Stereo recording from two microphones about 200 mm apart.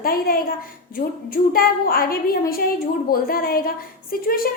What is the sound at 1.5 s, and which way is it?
A woman's voice, 45° left (ahead or behind).